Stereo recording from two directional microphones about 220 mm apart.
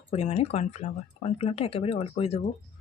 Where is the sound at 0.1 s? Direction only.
30° left (ahead or behind).